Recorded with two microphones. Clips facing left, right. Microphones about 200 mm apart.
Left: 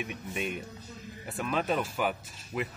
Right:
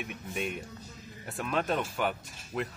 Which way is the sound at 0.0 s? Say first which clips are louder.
Left 1 dB; centre (ahead or behind).